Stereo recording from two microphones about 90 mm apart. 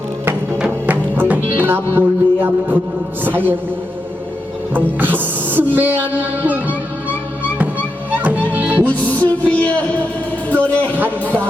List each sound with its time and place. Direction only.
0.6 s music: 20° right (ahead or behind)
3.2 s speech: 20° right (ahead or behind)
4.7 s speech: 20° right (ahead or behind)
8.1 s music: 20° right (ahead or behind)
9.2 s music: 15° left (ahead or behind)
10.9 s speech: 20° right (ahead or behind)